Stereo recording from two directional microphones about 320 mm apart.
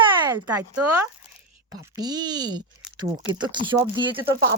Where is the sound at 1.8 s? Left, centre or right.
Centre.